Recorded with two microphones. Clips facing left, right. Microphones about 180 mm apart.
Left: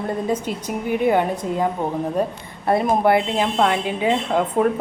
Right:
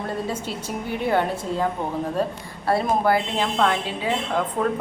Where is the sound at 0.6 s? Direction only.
15° left (ahead or behind).